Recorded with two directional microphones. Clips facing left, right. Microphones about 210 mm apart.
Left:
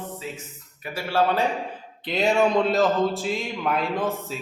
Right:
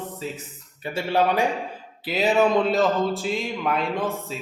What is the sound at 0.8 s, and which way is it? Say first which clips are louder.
Speech: right 1 dB; 20° right (ahead or behind).